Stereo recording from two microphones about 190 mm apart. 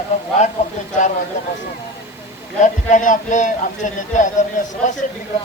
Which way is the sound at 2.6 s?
40° left (ahead or behind).